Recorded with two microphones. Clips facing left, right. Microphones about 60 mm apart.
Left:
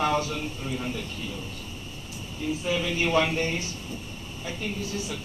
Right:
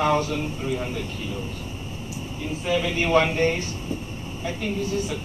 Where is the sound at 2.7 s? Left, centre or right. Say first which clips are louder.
Right 5 dB; right.